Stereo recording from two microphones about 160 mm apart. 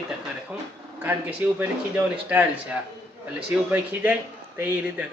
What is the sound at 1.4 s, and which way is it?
Speech, 10° right (ahead or behind).